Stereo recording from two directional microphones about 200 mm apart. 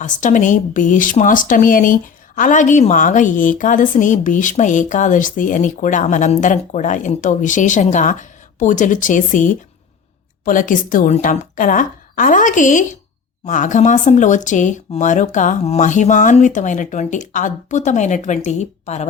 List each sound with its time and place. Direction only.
0.0 s speech: 40° left (ahead or behind)